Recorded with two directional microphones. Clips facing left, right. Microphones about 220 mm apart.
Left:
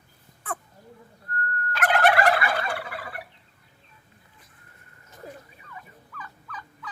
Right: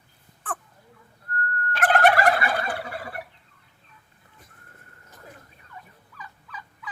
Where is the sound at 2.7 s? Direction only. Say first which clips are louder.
Right 2 dB; 25° right (ahead or behind).